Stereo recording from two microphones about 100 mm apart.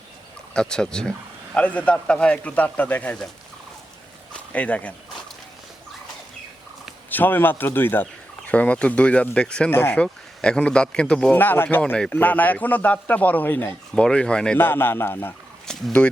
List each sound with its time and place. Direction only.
0.5 s a man's voice: 5° left (ahead or behind)
4.5 s a man's voice: 15° left (ahead or behind)
7.1 s a man's voice: 20° left (ahead or behind)
9.6 s a man's voice: 20° left (ahead or behind)
11.3 s speech: 20° left (ahead or behind)
11.8 s a man's voice: 10° left (ahead or behind)
14.6 s speech: 20° left (ahead or behind)
15.6 s speech: 10° left (ahead or behind)